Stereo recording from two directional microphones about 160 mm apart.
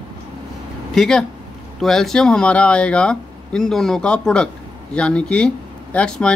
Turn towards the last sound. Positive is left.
turn(degrees=5)  # may be behind; listen again after turning